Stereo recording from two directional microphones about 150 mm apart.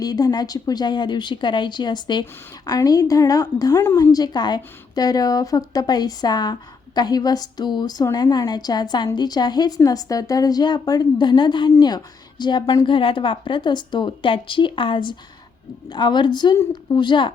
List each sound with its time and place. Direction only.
0.0 s a woman's voice: 25° left (ahead or behind)